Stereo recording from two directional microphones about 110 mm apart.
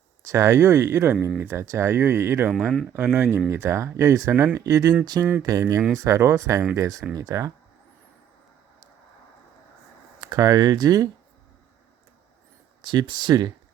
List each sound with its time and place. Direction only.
0.3 s speech: 25° right (ahead or behind)
2.5 s speech: 5° right (ahead or behind)
2.9 s speech: 20° right (ahead or behind)
10.2 s speech: 35° right (ahead or behind)
12.8 s speech: 45° right (ahead or behind)